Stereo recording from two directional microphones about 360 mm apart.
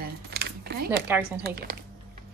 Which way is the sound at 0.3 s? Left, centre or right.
Right.